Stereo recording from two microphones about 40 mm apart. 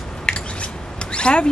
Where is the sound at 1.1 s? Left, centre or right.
Left.